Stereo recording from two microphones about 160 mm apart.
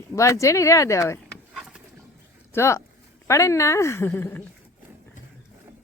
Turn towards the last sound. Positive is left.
turn(degrees=15)  # may be behind; listen again after turning